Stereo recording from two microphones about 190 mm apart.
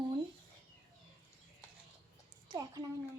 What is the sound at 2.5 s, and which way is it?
Speech, 20° right (ahead or behind).